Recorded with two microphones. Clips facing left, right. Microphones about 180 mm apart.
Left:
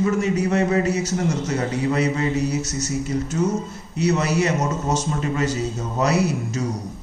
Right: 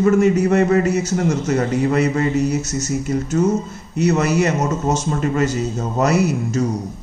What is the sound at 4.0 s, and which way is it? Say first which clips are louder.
A man's voice: right 4 dB; 50° right (ahead or behind).